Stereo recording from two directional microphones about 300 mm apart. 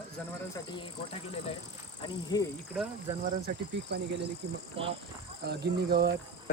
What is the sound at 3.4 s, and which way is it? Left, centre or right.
Speech, right.